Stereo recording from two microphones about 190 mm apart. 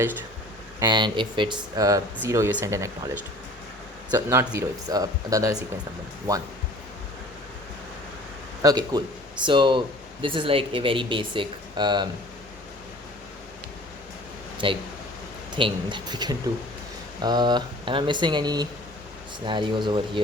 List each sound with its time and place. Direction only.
0.8 s speech: 25° right (ahead or behind)
4.1 s speech: 15° right (ahead or behind)
8.6 s speech: 20° right (ahead or behind)
14.6 s speech: 30° right (ahead or behind)